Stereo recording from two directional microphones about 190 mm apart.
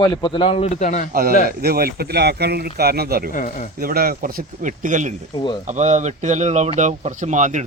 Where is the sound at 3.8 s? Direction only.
50° right (ahead or behind).